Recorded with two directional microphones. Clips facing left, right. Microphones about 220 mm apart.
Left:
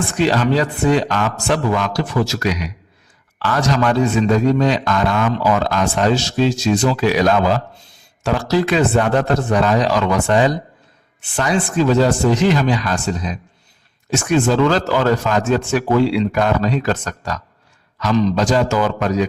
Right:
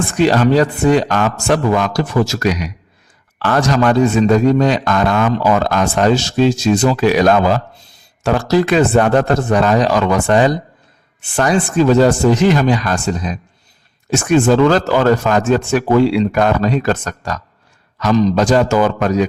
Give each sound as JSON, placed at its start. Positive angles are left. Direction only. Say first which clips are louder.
{"t": 0.2, "sound": "a man's voice", "louder": "right 4 dB", "side_deg": -45}